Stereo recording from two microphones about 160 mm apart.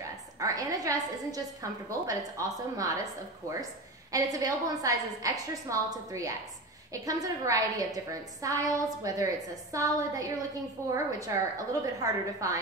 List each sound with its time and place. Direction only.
0.4 s a woman's voice: 20° right (ahead or behind)
4.1 s a woman's voice: 20° right (ahead or behind)